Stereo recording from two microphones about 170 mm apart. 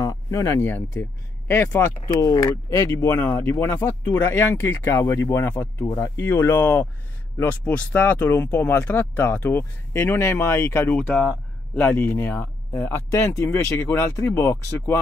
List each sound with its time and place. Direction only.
0.0 s speech: 20° left (ahead or behind)